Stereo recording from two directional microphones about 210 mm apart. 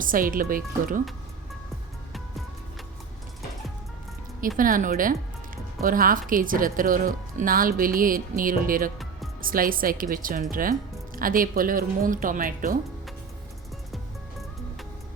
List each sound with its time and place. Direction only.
0.0 s speech: 40° right (ahead or behind)
4.4 s speech: 40° right (ahead or behind)